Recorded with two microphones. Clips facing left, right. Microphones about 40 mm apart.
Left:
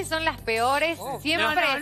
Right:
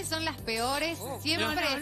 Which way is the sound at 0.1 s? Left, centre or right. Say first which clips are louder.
Left 7 dB; left.